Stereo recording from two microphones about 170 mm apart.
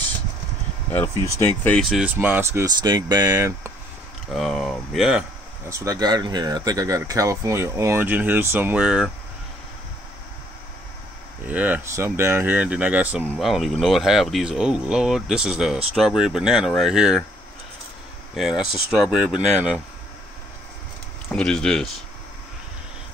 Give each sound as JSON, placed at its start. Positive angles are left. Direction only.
{"t": 1.6, "sound": "speech", "side_deg": 5}
{"t": 2.1, "sound": "speech", "side_deg": -10}
{"t": 4.3, "sound": "speech", "side_deg": 0}
{"t": 5.7, "sound": "speech", "side_deg": -20}
{"t": 11.4, "sound": "speech", "side_deg": -10}
{"t": 18.3, "sound": "speech", "side_deg": -5}
{"t": 21.3, "sound": "speech", "side_deg": 5}